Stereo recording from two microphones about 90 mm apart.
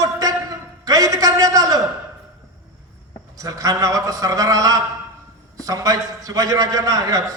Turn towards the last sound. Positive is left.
turn(degrees=-40)  # may be behind; listen again after turning